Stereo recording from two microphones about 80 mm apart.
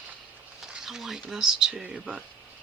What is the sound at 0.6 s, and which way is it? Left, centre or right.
Speech, centre.